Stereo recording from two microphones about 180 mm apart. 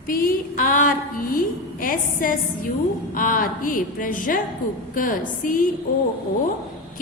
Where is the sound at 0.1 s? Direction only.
50° left (ahead or behind).